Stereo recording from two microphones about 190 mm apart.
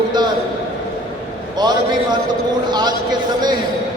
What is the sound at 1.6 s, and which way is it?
A man's voice, 20° right (ahead or behind).